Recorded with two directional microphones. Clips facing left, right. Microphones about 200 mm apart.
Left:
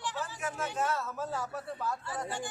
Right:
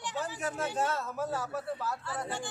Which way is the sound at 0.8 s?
25° right (ahead or behind).